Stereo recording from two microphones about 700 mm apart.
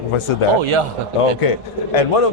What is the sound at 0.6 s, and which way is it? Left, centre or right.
Speech, right.